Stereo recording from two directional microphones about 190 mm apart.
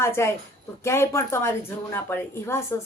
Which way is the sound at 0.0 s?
15° left (ahead or behind).